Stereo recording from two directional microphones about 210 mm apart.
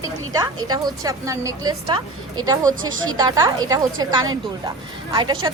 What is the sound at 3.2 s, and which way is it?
Speech, 15° right (ahead or behind).